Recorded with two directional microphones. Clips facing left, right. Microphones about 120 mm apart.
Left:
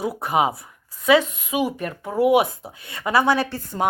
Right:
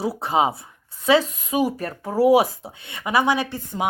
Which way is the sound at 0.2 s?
25° right (ahead or behind).